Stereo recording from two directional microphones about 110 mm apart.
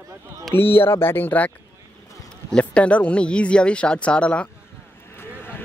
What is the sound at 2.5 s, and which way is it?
Speech, 10° left (ahead or behind).